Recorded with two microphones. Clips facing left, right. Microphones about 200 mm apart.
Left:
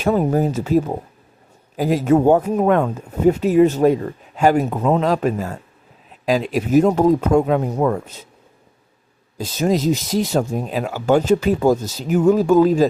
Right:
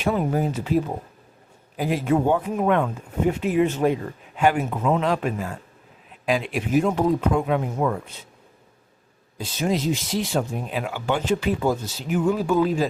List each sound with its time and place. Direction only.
0.0 s speech: 40° left (ahead or behind)
9.4 s speech: 40° left (ahead or behind)